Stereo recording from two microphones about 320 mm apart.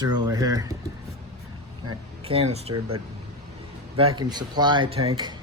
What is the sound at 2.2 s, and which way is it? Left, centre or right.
Speech, centre.